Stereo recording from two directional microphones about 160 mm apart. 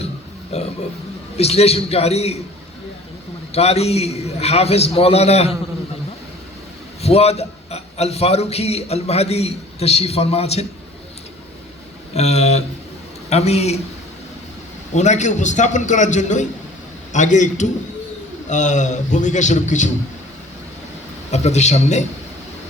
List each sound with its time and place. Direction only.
0.5 s a man's voice: 40° left (ahead or behind)
3.5 s a man's voice: 40° left (ahead or behind)
7.0 s a man's voice: 40° left (ahead or behind)
12.1 s a man's voice: 40° left (ahead or behind)
14.9 s a man's voice: 45° left (ahead or behind)
21.2 s a man's voice: 45° left (ahead or behind)